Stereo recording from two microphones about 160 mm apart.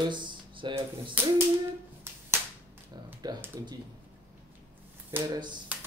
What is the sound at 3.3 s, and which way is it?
Speech, 25° right (ahead or behind).